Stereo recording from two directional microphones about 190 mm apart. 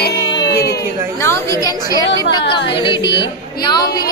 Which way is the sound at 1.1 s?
15° left (ahead or behind).